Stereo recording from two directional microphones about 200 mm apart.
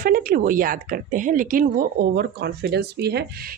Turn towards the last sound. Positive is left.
turn(degrees=-50)  # may be behind; listen again after turning